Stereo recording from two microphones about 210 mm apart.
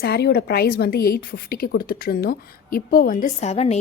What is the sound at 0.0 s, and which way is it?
A woman's voice, 50° left (ahead or behind).